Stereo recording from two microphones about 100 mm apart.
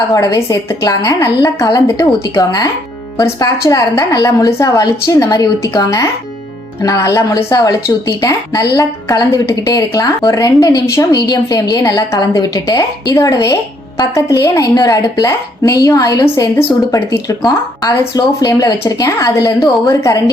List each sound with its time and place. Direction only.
0.1 s a woman's voice: 35° left (ahead or behind)